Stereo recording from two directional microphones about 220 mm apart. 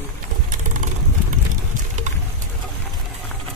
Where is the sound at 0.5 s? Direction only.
35° right (ahead or behind).